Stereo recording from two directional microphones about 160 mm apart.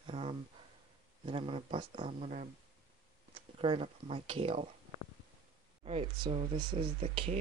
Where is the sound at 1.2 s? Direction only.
35° right (ahead or behind).